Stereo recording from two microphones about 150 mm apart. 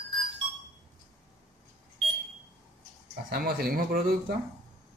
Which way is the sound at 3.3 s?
90° right.